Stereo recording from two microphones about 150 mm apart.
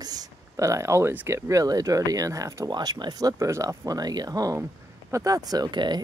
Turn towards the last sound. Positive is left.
turn(degrees=-30)  # may be behind; listen again after turning